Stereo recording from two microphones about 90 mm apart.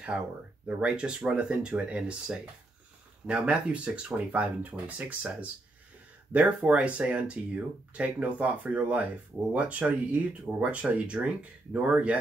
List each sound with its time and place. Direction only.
0.7 s speech: 15° right (ahead or behind)